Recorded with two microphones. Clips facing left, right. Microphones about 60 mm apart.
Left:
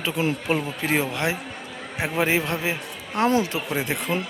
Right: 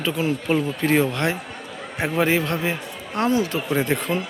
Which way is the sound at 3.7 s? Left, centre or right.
Centre.